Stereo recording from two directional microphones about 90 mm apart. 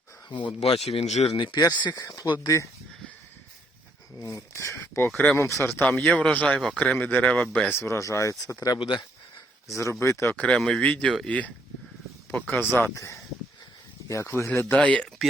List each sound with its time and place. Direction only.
0.3 s speech: 65° left (ahead or behind)
0.9 s speech: 90° left
1.5 s speech: 50° left (ahead or behind)
2.0 s speech: 40° left (ahead or behind)
2.2 s speech: 60° left (ahead or behind)
4.2 s speech: 35° left (ahead or behind); by 7.7 s 15° left (ahead or behind)
7.8 s speech: 35° left (ahead or behind)
8.5 s speech: 45° left (ahead or behind)
8.8 s speech: 60° left (ahead or behind)
9.6 s speech: 35° left (ahead or behind)
10.3 s speech: 15° left (ahead or behind)